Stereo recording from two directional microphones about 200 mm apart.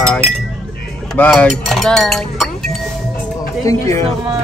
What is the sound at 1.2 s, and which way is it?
Speech, 5° left (ahead or behind).